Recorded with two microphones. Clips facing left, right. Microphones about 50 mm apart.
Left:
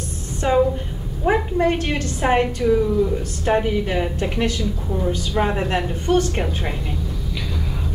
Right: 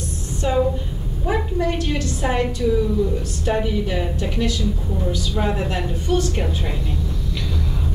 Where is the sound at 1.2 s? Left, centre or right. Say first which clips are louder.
Left 4 dB; left.